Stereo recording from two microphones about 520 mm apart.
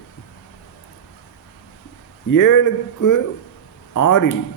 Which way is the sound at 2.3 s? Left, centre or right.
Left.